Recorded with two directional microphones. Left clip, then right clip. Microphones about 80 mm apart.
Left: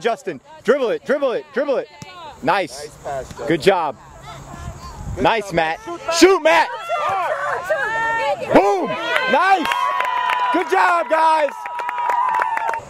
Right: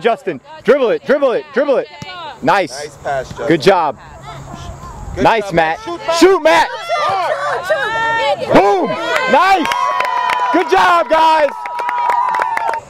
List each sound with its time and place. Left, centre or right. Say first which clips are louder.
0.0 s speech: right 6 dB; centre
3.1 s speech: right 7 dB; centre
3.4 s speech: right 5 dB; centre
5.5 s speech: right 5 dB; left
6.7 s speech: right 5 dB; right
8.3 s speech: right 5 dB; right
8.5 s speech: right 4 dB; centre
8.8 s speech: right 4 dB; right
9.3 s speech: right 5 dB; centre
9.7 s a sound: right 4 dB; right
10.7 s speech: right 6 dB; centre
11.6 s a sound: right 6 dB; right